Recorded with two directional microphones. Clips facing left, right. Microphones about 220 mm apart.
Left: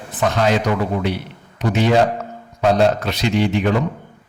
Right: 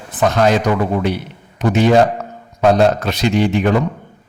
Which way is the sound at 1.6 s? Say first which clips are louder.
Right 4 dB; 50° right (ahead or behind).